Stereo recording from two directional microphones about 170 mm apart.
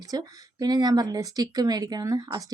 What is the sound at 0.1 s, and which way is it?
Speech, 20° right (ahead or behind).